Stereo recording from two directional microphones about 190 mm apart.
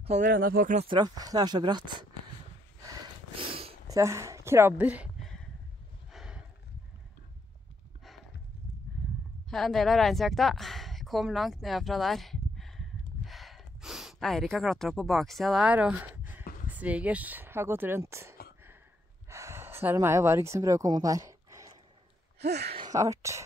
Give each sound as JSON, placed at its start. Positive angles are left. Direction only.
{"t": 0.0, "sound": "speech", "side_deg": -35}
{"t": 0.4, "sound": "speech", "side_deg": -50}
{"t": 0.8, "sound": "speech", "side_deg": -20}
{"t": 2.8, "sound": "a sound", "side_deg": -25}
{"t": 3.9, "sound": "speech", "side_deg": -15}
{"t": 6.1, "sound": "a sound", "side_deg": -5}
{"t": 9.5, "sound": "speech", "side_deg": 0}
{"t": 19.2, "sound": "a sound", "side_deg": -15}
{"t": 22.4, "sound": "speech", "side_deg": -60}
{"t": 22.8, "sound": "speech", "side_deg": -20}